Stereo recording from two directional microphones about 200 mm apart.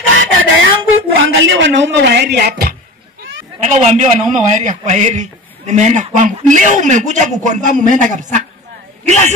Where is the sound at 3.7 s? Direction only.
35° right (ahead or behind).